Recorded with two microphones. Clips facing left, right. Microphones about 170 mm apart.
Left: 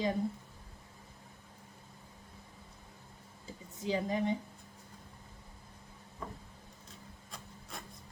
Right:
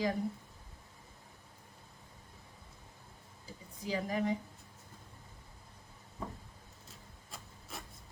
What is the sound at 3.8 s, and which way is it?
Speech, 25° left (ahead or behind).